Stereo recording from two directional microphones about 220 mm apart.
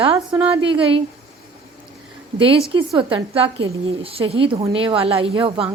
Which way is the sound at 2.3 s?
25° right (ahead or behind).